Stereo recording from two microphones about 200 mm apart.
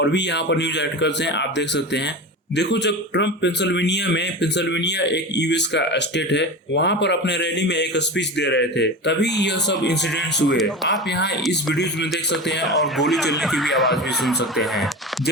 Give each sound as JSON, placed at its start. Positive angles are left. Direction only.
{"t": 0.0, "sound": "a man's voice", "side_deg": 60}
{"t": 12.6, "sound": "speech", "side_deg": 0}